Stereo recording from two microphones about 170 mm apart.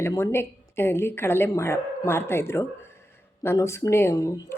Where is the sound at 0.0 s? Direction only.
15° left (ahead or behind).